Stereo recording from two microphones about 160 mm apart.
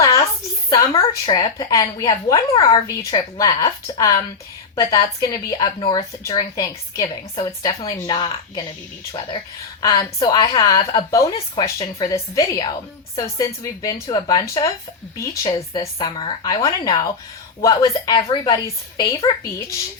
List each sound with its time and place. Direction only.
0.7 s a woman's voice: 20° left (ahead or behind)
9.8 s a woman's voice: 25° left (ahead or behind)